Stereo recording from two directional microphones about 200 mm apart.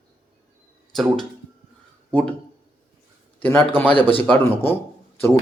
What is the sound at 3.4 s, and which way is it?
Speech, 10° left (ahead or behind).